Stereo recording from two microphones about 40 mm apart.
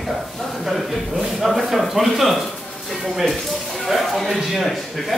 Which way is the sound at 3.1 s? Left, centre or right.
Centre.